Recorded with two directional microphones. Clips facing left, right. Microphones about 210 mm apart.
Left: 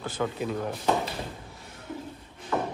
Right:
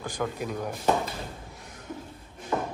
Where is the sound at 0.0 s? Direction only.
10° right (ahead or behind).